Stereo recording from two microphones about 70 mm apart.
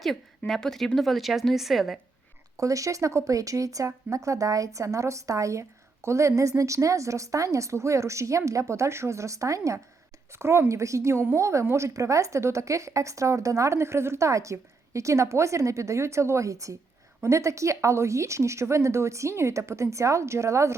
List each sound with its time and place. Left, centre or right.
0.0 s speech: centre
2.6 s speech: right
10.3 s speech: right